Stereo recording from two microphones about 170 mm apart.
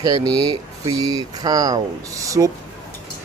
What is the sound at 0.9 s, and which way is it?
Speech, 20° right (ahead or behind).